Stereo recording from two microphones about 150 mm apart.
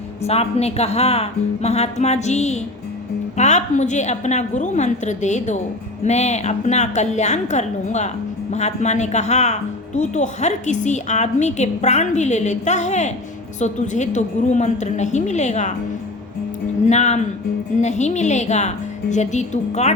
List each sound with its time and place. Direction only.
0.2 s a woman's voice: 45° left (ahead or behind)
16.8 s a woman's voice: 50° left (ahead or behind)